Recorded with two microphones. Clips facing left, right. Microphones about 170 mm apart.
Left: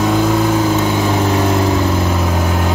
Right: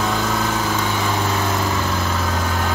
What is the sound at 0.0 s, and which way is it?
Vehicle, 15° left (ahead or behind).